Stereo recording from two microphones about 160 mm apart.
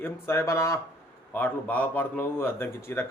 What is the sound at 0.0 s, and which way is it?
Speech, 15° left (ahead or behind).